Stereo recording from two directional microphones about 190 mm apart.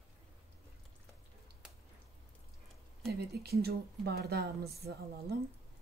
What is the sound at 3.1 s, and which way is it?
Speech, 55° right (ahead or behind).